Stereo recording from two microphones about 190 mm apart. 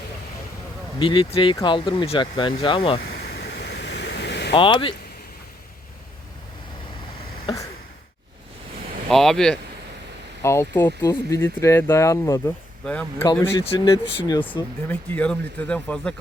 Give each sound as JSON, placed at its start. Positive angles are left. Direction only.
{"t": 0.9, "sound": "speech", "side_deg": 25}
{"t": 3.0, "sound": "waves", "side_deg": 55}
{"t": 4.5, "sound": "speech", "side_deg": 25}
{"t": 9.0, "sound": "speech", "side_deg": 0}
{"t": 10.4, "sound": "speech", "side_deg": 15}
{"t": 14.8, "sound": "speech", "side_deg": 10}